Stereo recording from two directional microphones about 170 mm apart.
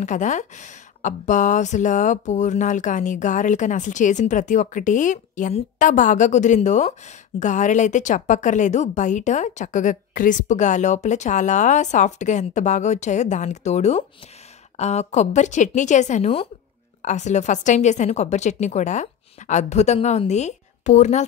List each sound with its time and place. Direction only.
0.0 s speech: 45° left (ahead or behind)